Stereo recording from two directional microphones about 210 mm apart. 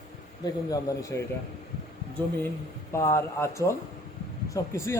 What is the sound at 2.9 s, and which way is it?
Speech, 15° left (ahead or behind).